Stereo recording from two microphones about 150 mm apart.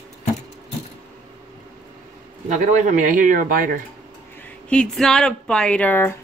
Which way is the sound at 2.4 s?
55° right (ahead or behind).